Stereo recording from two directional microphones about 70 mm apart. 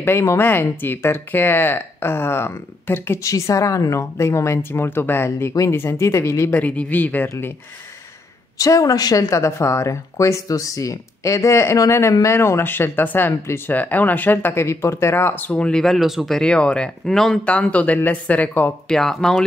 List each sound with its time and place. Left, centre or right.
0.0 s speech: left
3.2 s speech: left
5.5 s speech: left
6.5 s speech: left
8.5 s speech: left
12.4 s speech: left
15.5 s speech: centre
16.3 s speech: centre
17.5 s speech: centre
18.9 s speech: centre